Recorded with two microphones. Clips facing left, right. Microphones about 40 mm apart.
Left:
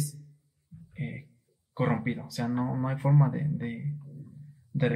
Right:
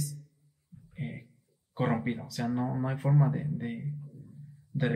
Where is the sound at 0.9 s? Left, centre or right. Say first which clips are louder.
Left 2 dB; centre.